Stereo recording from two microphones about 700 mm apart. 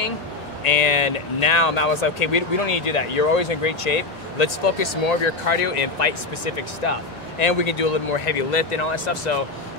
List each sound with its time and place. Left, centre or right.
0.7 s speech: left